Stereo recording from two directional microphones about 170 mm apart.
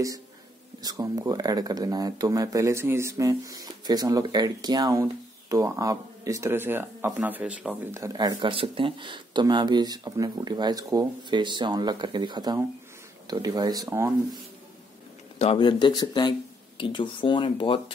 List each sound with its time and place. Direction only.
0.8 s speech: 20° right (ahead or behind)
15.3 s speech: 35° left (ahead or behind)